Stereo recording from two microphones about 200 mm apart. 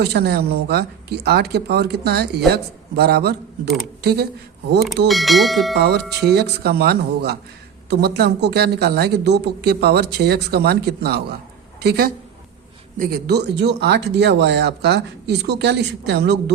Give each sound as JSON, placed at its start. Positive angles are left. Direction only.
{"t": 0.0, "sound": "speech", "side_deg": -55}
{"t": 5.0, "sound": "speech", "side_deg": 0}
{"t": 5.7, "sound": "speech", "side_deg": -55}